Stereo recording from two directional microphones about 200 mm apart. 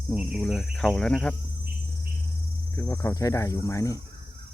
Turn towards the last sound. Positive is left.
turn(degrees=15)  # may be behind; listen again after turning